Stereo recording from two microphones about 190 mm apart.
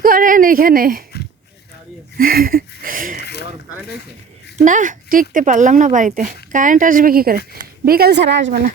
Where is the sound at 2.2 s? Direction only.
50° right (ahead or behind).